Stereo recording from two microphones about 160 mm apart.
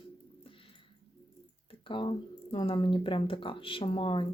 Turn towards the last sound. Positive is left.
turn(degrees=30)  # may be behind; listen again after turning